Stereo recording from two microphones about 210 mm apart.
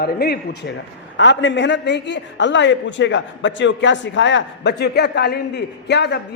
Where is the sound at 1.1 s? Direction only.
60° left (ahead or behind).